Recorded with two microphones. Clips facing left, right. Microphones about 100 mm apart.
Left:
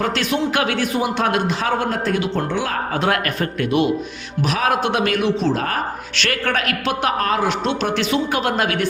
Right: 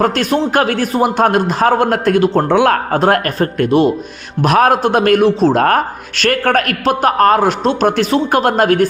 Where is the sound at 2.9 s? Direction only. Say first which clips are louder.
Right 7 dB; 40° right (ahead or behind).